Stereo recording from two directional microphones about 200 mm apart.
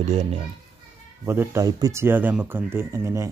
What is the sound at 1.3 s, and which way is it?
A man's voice, 15° right (ahead or behind).